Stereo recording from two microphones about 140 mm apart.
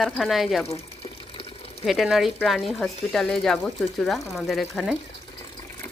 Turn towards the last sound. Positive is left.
turn(degrees=0)  # may be behind; listen again after turning